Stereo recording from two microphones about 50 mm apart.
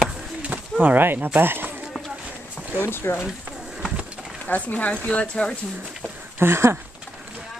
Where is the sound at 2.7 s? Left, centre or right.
Left.